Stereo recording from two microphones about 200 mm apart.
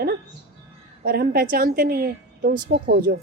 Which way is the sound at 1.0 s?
50° right (ahead or behind).